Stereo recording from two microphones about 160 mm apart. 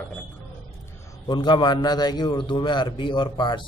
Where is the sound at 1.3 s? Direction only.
30° left (ahead or behind).